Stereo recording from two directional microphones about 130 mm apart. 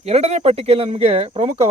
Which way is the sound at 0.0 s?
55° right (ahead or behind).